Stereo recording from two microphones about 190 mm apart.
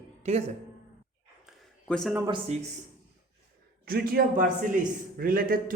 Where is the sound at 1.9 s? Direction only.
5° left (ahead or behind).